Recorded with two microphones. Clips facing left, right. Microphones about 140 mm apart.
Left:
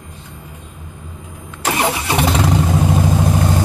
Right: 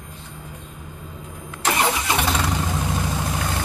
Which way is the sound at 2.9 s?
25° left (ahead or behind).